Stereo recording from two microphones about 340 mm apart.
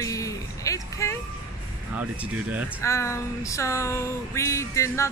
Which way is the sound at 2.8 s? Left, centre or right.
Centre.